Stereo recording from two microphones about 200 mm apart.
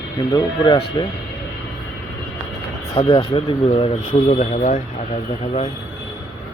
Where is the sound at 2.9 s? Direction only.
30° left (ahead or behind).